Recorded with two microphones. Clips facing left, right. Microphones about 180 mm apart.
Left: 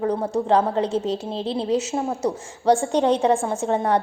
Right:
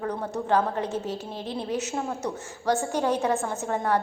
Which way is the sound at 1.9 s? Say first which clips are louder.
Left 6 dB; 30° left (ahead or behind).